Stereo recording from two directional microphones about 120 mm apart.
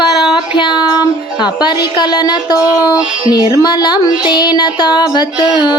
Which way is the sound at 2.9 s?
35° left (ahead or behind).